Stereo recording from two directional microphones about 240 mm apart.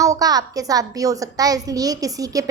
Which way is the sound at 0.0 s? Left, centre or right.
Centre.